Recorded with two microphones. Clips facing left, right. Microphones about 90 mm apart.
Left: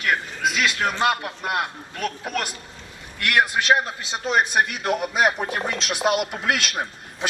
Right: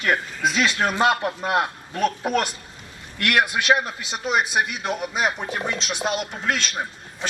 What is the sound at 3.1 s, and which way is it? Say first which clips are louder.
Speech: even; 20° left (ahead or behind).